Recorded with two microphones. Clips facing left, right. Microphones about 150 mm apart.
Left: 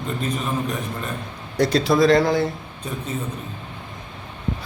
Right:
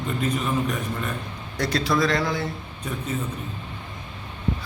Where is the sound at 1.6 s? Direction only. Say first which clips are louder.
Left 6 dB; 30° left (ahead or behind).